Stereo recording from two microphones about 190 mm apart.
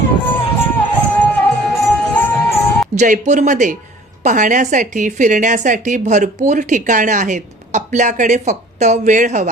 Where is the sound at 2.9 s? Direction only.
40° right (ahead or behind).